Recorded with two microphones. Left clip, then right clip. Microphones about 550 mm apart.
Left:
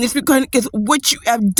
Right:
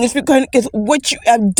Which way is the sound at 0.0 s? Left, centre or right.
Left.